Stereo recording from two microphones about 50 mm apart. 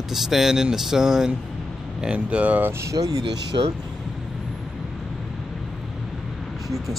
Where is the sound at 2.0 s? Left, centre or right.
Right.